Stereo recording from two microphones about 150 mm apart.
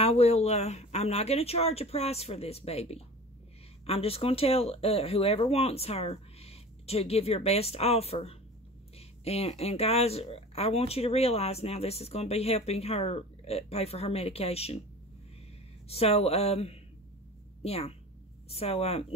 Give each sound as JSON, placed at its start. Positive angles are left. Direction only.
{"t": 0.0, "sound": "speech", "side_deg": 45}
{"t": 15.9, "sound": "speech", "side_deg": 40}